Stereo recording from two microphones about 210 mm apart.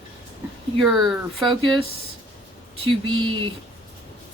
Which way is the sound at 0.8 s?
Centre (ahead or behind).